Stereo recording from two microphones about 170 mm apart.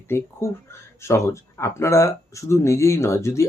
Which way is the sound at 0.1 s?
15° left (ahead or behind).